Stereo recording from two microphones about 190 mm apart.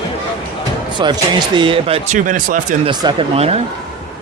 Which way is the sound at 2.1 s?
45° right (ahead or behind).